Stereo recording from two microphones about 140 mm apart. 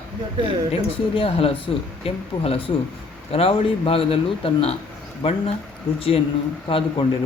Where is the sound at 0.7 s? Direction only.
45° left (ahead or behind).